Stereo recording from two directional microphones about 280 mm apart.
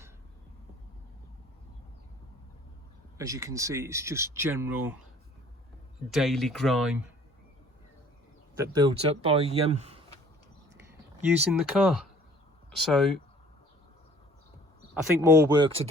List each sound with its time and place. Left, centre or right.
3.2 s speech: centre
6.1 s speech: centre
8.7 s speech: centre
11.3 s speech: centre
15.2 s speech: centre